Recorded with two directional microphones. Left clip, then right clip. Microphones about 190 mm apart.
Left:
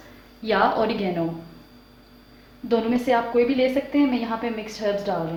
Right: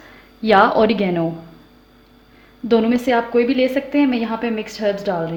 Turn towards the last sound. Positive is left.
turn(degrees=-50)  # may be behind; listen again after turning